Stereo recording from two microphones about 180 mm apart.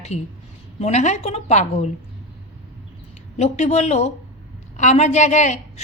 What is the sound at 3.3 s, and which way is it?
A woman's voice, 35° left (ahead or behind).